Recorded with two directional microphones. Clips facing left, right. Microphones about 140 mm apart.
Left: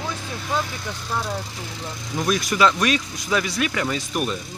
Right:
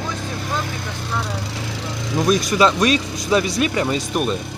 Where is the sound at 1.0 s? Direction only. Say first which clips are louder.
Even; 75° right (ahead or behind).